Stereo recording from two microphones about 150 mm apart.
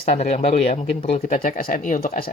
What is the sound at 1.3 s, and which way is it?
Speech, 65° left (ahead or behind).